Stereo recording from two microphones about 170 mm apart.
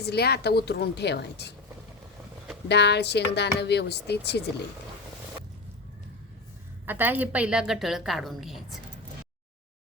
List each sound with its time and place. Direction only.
0.0 s a woman's voice: 70° left (ahead or behind)
2.6 s speech: 80° left
6.8 s a woman's voice: 10° right (ahead or behind)